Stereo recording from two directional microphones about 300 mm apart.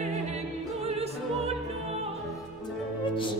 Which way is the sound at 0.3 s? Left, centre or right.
Right.